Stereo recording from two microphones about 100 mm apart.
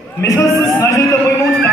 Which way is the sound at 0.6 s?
30° left (ahead or behind).